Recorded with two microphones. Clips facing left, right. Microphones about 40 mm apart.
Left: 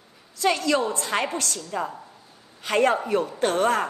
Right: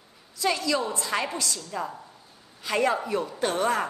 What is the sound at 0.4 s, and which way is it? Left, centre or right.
Speech, left.